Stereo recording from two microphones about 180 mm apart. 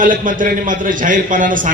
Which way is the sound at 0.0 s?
50° right (ahead or behind).